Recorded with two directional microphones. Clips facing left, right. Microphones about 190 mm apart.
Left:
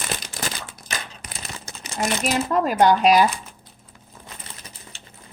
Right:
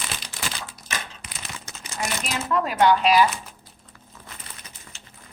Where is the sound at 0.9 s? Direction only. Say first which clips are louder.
Left 1 dB; 40° left (ahead or behind).